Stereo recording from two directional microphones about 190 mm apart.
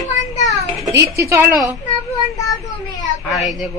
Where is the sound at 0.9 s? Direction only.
15° right (ahead or behind).